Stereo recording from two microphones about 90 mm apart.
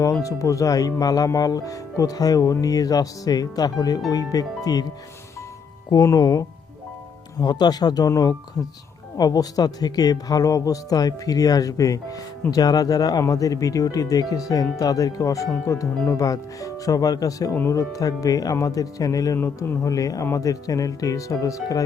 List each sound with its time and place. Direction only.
0.0 s speech: 40° left (ahead or behind)
5.9 s speech: 45° left (ahead or behind)
7.3 s speech: 50° left (ahead or behind)
17.5 s speech: 25° left (ahead or behind)
17.7 s speech: 40° left (ahead or behind)